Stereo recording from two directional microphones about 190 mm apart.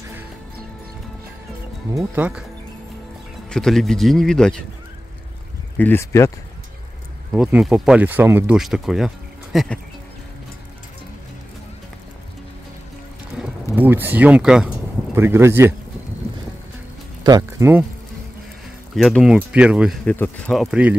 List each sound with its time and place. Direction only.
2.0 s speech: 10° right (ahead or behind)
3.4 s speech: 5° left (ahead or behind)
5.8 s speech: 10° left (ahead or behind)
7.3 s speech: 5° right (ahead or behind)
13.7 s speech: 10° right (ahead or behind)
17.2 s speech: 20° right (ahead or behind)
18.9 s speech: centre (ahead or behind)